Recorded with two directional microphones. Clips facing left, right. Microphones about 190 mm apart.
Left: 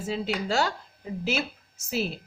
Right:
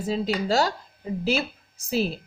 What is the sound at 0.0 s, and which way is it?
Speech, 40° right (ahead or behind).